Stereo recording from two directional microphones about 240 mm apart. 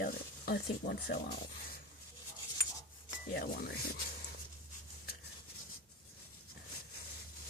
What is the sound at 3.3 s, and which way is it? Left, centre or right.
Rub, left.